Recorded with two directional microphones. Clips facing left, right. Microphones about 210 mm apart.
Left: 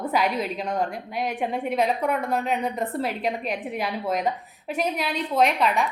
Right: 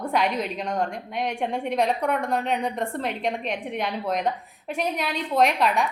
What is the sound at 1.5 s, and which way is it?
A woman's voice, centre (ahead or behind).